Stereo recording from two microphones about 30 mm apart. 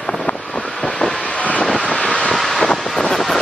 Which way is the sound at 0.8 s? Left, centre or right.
Left.